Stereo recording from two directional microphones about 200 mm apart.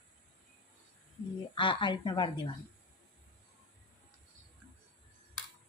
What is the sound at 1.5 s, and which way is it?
Speech, 25° left (ahead or behind).